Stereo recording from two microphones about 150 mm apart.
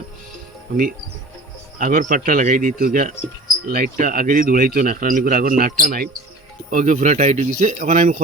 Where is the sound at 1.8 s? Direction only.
70° right (ahead or behind).